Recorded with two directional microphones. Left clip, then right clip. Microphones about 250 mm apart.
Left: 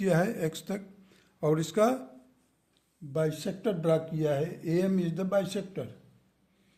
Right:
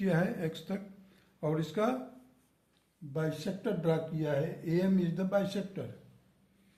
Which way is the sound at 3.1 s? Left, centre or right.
Left.